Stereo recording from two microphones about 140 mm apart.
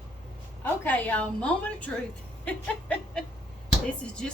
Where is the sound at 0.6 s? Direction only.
10° left (ahead or behind).